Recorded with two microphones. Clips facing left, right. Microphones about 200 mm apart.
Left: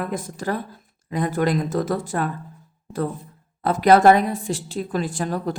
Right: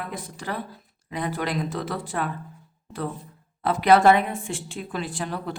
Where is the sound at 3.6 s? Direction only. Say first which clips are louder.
Left 3 dB; 45° left (ahead or behind).